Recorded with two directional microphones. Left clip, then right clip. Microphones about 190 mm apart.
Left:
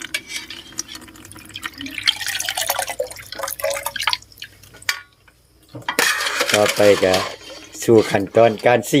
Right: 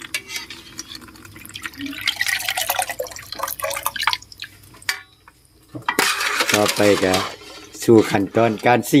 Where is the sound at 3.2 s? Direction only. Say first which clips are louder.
Left 1 dB; centre (ahead or behind).